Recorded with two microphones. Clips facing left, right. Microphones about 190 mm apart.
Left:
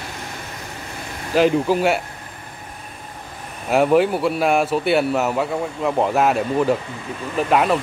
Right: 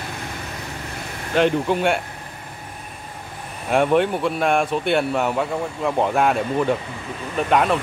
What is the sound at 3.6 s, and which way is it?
Speech, 5° left (ahead or behind).